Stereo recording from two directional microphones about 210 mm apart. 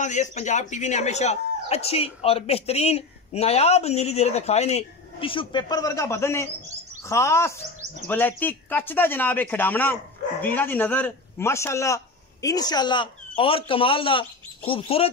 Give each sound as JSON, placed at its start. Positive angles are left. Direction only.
{"t": 0.0, "sound": "a man's voice", "side_deg": 35}